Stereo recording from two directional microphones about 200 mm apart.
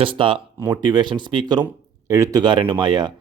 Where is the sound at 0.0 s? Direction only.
25° right (ahead or behind).